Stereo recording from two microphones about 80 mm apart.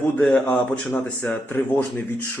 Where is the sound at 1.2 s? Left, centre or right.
Left.